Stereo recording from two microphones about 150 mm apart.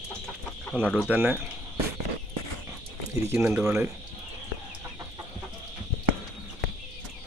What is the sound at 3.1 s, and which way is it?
Speech, 15° right (ahead or behind).